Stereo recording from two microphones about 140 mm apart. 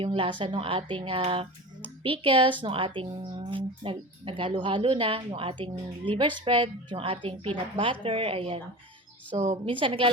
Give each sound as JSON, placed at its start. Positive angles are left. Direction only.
{"t": 0.0, "sound": "a woman's voice", "side_deg": -40}